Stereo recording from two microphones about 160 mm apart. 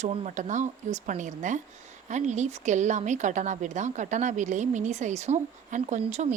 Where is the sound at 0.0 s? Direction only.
50° right (ahead or behind).